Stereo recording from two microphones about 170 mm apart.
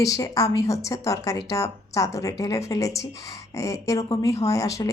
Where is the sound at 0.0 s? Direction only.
20° left (ahead or behind).